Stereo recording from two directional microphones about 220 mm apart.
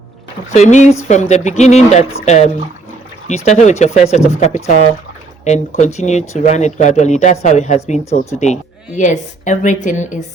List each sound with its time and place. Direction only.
0.5 s speech: 30° left (ahead or behind)
9.0 s speech: 35° left (ahead or behind)